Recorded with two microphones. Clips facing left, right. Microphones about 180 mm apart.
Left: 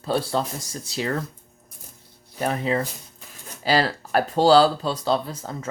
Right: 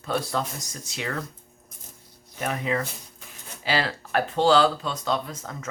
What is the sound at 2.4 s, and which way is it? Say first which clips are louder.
Speech: left 3 dB; 30° left (ahead or behind).